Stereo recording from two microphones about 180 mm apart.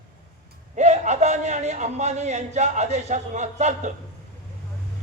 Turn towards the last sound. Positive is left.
turn(degrees=-40)  # may be behind; listen again after turning